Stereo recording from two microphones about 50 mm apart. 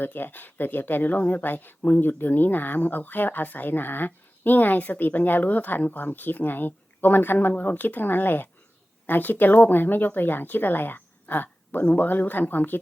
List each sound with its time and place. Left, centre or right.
0.0 s speech: left